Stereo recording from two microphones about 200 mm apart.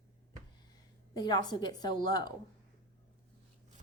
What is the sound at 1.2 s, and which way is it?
A woman's voice, 20° left (ahead or behind).